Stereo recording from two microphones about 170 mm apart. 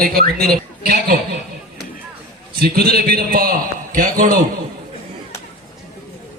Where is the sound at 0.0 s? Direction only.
65° right (ahead or behind).